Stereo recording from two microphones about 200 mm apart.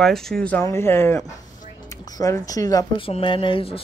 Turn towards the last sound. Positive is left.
turn(degrees=25)  # may be behind; listen again after turning